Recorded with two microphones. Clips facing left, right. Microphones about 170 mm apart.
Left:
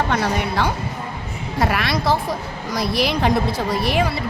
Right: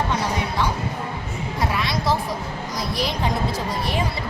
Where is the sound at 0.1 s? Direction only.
65° left (ahead or behind).